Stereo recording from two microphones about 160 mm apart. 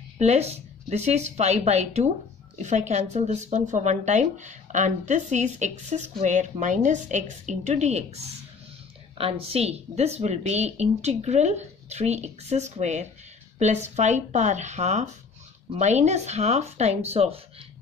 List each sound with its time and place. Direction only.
0.2 s speech: 40° right (ahead or behind)
9.2 s speech: 40° right (ahead or behind)